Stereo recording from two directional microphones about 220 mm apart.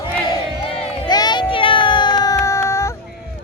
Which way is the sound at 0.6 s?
25° left (ahead or behind).